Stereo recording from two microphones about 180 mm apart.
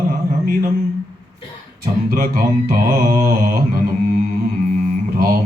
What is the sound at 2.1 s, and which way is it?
Mantra, 50° right (ahead or behind).